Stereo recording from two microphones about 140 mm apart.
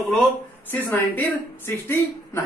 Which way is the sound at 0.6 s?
15° left (ahead or behind).